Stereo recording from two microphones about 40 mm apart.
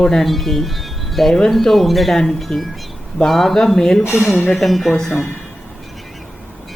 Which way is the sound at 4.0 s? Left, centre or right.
Left.